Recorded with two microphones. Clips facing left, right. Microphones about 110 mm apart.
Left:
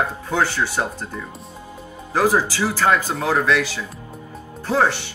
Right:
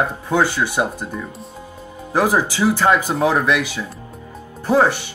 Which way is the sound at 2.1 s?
15° right (ahead or behind).